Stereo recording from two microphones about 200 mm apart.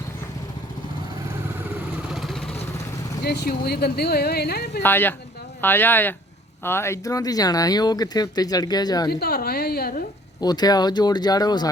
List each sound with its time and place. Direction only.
2.1 s vehicle: centre (ahead or behind)
3.2 s speech: 50° left (ahead or behind)
4.8 s speech: 10° left (ahead or behind)
9.0 s speech: 50° left (ahead or behind)
10.4 s speech: 20° left (ahead or behind)